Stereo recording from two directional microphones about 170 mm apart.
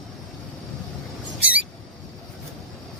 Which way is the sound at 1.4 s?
10° right (ahead or behind).